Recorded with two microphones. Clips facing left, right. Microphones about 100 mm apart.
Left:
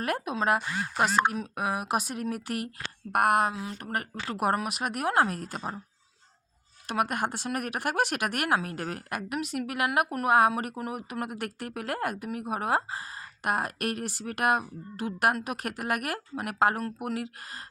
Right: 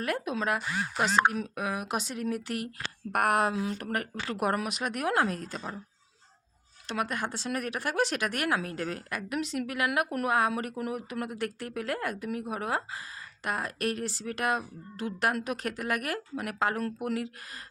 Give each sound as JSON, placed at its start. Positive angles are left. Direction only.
{"t": 0.0, "sound": "speech", "side_deg": 50}
{"t": 1.6, "sound": "a sound", "side_deg": 10}
{"t": 1.9, "sound": "speech", "side_deg": 50}
{"t": 3.1, "sound": "a sound", "side_deg": 5}
{"t": 3.9, "sound": "speech", "side_deg": 40}
{"t": 6.8, "sound": "speech", "side_deg": 55}